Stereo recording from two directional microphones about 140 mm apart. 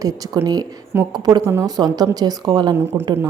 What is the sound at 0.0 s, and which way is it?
A woman's voice, 25° right (ahead or behind).